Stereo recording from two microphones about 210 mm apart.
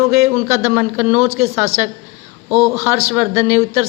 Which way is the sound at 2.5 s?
15° left (ahead or behind).